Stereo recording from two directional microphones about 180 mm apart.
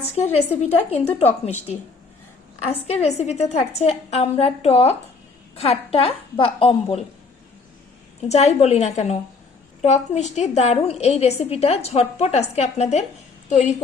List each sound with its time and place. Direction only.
0.0 s a woman's voice: 35° left (ahead or behind)
8.3 s a woman's voice: 35° left (ahead or behind)